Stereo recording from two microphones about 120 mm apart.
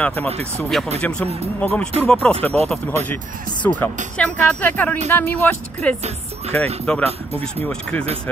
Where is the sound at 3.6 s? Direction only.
10° left (ahead or behind).